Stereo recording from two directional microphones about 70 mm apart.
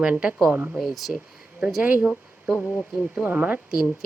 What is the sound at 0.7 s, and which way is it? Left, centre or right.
A woman's voice, centre.